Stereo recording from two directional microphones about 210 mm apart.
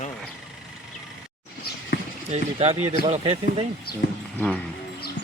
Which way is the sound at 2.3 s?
30° right (ahead or behind).